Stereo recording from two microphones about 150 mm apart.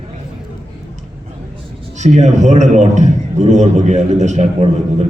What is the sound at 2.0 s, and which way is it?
A man's voice, 50° right (ahead or behind).